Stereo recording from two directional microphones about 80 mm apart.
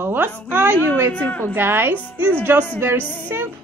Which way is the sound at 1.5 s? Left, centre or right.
Right.